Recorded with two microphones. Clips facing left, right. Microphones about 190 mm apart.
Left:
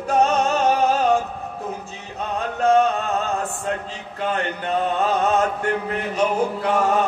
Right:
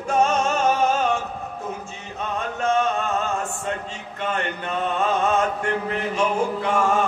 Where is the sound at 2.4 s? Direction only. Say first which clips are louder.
Left 5 dB; 35° left (ahead or behind).